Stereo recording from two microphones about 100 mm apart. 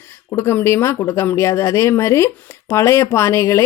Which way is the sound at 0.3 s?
25° left (ahead or behind).